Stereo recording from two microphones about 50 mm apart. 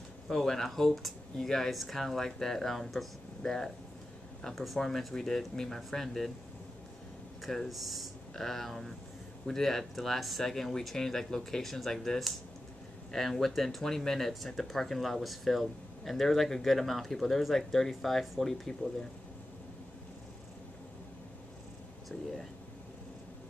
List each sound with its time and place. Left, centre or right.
0.3 s speech: centre
4.7 s speech: centre
7.4 s speech: centre
22.1 s speech: left